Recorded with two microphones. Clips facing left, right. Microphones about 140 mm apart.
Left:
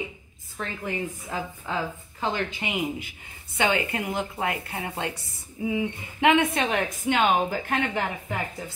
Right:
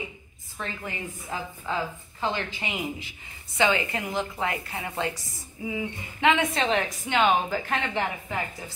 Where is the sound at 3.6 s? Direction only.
55° left (ahead or behind).